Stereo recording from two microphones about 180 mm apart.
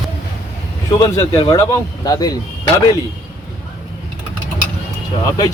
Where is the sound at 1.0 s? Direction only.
25° left (ahead or behind).